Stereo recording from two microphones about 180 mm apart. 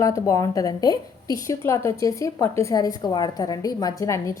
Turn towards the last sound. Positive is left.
turn(degrees=15)  # may be behind; listen again after turning